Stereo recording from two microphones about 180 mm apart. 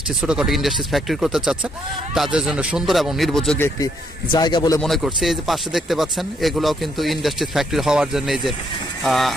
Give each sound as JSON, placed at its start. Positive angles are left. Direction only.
{"t": 0.2, "sound": "speech", "side_deg": -5}
{"t": 4.3, "sound": "a man's voice", "side_deg": 25}
{"t": 4.8, "sound": "speech", "side_deg": 0}